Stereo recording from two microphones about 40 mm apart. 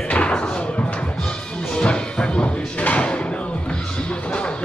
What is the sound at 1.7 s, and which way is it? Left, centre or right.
Music, left.